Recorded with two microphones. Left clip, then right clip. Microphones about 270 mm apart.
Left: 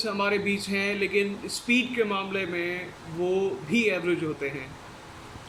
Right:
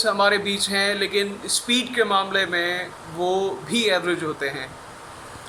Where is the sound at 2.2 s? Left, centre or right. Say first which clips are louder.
Right 8 dB; right.